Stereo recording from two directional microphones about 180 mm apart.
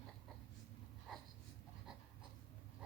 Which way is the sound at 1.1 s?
Centre (ahead or behind).